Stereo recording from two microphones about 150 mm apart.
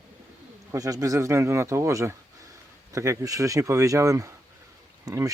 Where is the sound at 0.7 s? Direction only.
20° right (ahead or behind).